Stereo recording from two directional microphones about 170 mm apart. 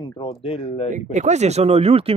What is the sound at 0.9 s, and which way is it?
Speech, 45° right (ahead or behind).